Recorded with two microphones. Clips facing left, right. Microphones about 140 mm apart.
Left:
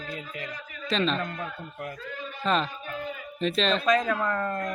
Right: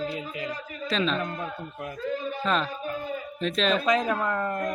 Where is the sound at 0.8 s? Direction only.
Centre (ahead or behind).